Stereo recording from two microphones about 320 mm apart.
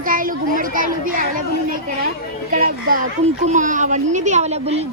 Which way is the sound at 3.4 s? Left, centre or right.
Right.